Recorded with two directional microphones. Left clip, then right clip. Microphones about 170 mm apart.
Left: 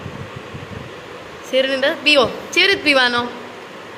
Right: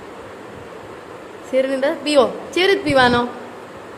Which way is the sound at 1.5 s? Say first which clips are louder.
Left 1 dB; 15° right (ahead or behind).